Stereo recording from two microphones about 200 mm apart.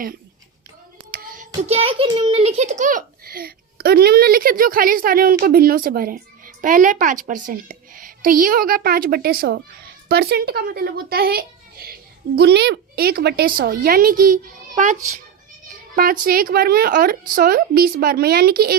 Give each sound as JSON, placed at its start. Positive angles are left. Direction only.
{"t": 1.1, "sound": "child singing", "side_deg": -45}
{"t": 1.6, "sound": "a child's voice", "side_deg": -30}
{"t": 16.2, "sound": "a child's voice", "side_deg": -45}